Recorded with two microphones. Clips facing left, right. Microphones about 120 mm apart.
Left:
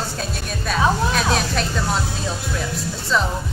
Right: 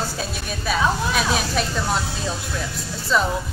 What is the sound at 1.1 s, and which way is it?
Speech, 5° right (ahead or behind).